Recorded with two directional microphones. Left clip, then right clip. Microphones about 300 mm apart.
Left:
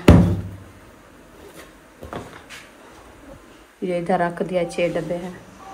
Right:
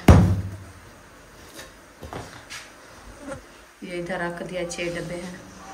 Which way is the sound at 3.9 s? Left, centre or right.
Centre.